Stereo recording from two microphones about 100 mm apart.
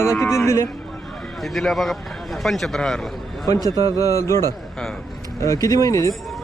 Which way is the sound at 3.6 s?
40° right (ahead or behind).